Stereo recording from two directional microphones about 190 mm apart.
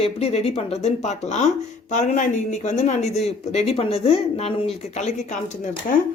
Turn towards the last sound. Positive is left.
turn(degrees=40)  # may be behind; listen again after turning